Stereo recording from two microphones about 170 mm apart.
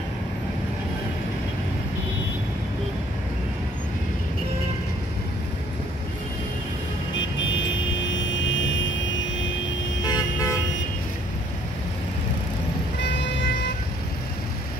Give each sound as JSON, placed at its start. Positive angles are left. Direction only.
{"t": 7.2, "sound": "vehicle", "side_deg": 90}
{"t": 10.0, "sound": "toot", "side_deg": 20}
{"t": 13.0, "sound": "vehicle", "side_deg": 90}